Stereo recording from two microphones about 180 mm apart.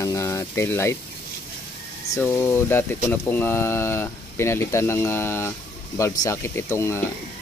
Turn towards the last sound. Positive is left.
turn(degrees=15)  # may be behind; listen again after turning